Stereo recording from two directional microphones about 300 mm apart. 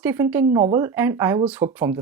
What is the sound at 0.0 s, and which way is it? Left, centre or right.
Speech, centre.